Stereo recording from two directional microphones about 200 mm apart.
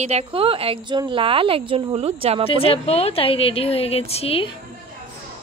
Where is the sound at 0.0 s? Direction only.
30° right (ahead or behind).